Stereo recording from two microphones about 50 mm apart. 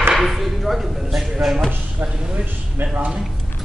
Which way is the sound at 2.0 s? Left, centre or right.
Right.